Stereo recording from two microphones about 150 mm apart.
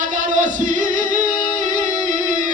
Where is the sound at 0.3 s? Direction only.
60° right (ahead or behind).